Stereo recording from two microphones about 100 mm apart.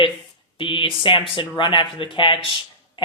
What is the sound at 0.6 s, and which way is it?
Speech, 55° left (ahead or behind).